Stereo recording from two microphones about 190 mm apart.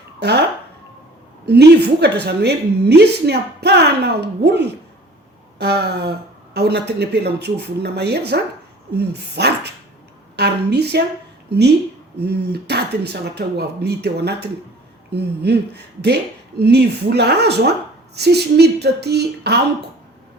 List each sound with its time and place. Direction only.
0.2 s speech: 60° right (ahead or behind)
1.5 s a woman's voice: 60° right (ahead or behind)